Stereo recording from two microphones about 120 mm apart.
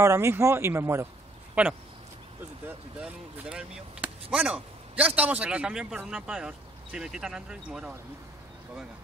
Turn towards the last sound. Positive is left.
turn(degrees=-5)  # may be behind; listen again after turning